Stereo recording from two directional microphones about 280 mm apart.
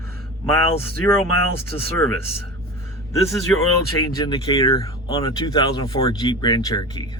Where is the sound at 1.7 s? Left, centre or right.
Centre.